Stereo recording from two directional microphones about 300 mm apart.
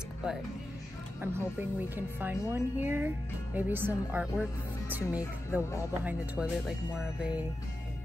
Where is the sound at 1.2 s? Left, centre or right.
Centre.